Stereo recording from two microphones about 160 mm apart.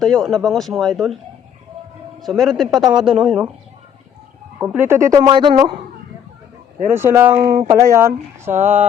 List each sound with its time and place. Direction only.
0.0 s speech: centre (ahead or behind)
2.2 s speech: centre (ahead or behind)
4.6 s a woman's voice: 10° right (ahead or behind); by 5.5 s 30° right (ahead or behind)
6.9 s speech: 15° right (ahead or behind)
8.5 s speech: 50° right (ahead or behind)